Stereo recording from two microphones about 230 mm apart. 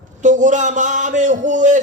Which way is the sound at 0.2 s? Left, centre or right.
Right.